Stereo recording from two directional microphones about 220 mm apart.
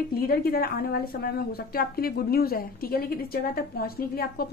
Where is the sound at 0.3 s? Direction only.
45° left (ahead or behind).